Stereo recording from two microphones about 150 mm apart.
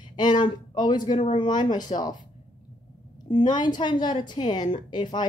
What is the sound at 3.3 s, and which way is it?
A woman's voice, 30° left (ahead or behind).